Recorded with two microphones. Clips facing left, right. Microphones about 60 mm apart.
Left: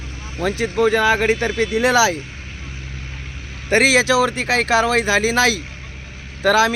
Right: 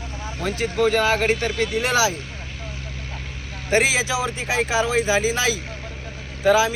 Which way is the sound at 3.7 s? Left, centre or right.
Left.